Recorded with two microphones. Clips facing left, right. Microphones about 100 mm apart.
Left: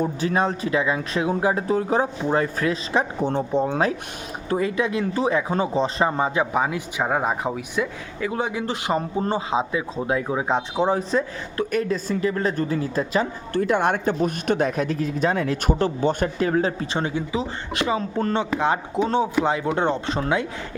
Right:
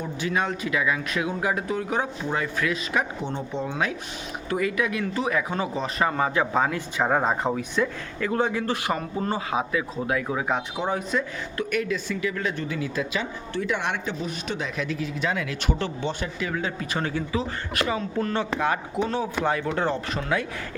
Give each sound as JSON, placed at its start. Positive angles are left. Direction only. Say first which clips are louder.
{"t": 0.0, "sound": "speech", "louder": "left 5 dB", "side_deg": 40}